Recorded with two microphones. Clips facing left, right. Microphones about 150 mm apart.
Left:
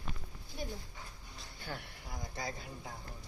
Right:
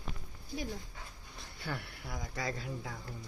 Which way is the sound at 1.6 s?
85° right.